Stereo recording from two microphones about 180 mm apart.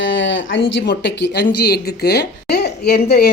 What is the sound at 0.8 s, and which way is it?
Speech, 75° left (ahead or behind).